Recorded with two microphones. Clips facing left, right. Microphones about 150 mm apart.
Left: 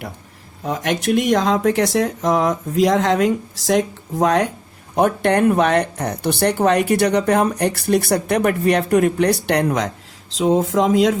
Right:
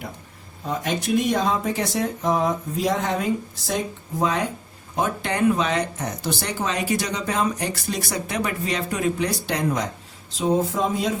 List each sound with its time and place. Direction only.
0.6 s speech: 85° left